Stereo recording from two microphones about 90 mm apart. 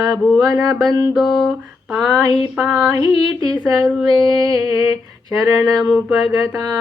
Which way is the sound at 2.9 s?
40° right (ahead or behind).